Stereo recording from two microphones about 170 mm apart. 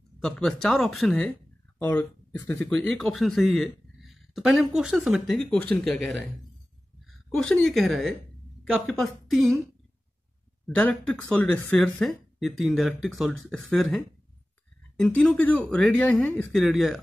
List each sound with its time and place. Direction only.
0.2 s speech: 5° left (ahead or behind)
7.2 s speech: 5° left (ahead or behind)
10.7 s speech: 10° left (ahead or behind)
15.0 s speech: 5° left (ahead or behind)